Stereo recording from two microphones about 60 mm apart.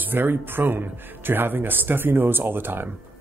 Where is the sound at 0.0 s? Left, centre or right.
Right.